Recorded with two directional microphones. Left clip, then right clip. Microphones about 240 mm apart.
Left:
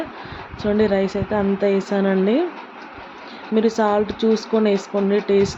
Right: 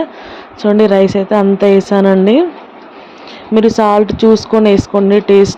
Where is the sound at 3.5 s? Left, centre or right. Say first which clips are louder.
Right 9 dB; right.